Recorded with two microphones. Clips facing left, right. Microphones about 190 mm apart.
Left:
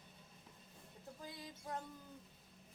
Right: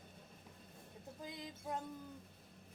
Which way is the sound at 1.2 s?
20° right (ahead or behind).